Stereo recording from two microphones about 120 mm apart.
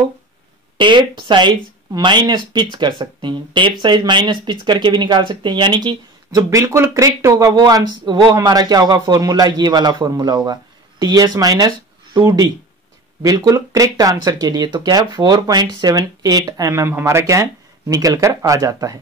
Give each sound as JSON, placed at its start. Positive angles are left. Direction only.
{"t": 0.7, "sound": "speech", "side_deg": -40}
{"t": 6.5, "sound": "speech", "side_deg": -25}